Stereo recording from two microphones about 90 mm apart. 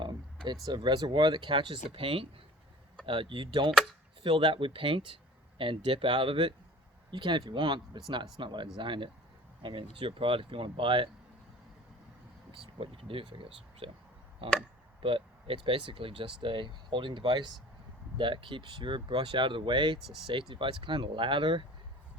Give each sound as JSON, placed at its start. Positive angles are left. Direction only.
{"t": 0.6, "sound": "speech", "side_deg": -55}
{"t": 10.0, "sound": "speech", "side_deg": -85}
{"t": 12.5, "sound": "speech", "side_deg": -85}